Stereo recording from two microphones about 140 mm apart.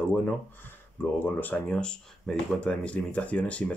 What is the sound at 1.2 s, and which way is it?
Speech, 10° left (ahead or behind).